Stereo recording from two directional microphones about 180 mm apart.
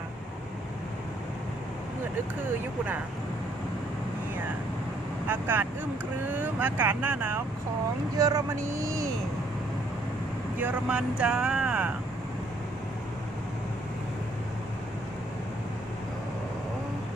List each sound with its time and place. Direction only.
5.3 s speech: 10° right (ahead or behind)
10.6 s speech: 5° right (ahead or behind)